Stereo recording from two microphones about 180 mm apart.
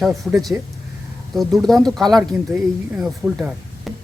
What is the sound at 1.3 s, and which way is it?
Speech, centre (ahead or behind).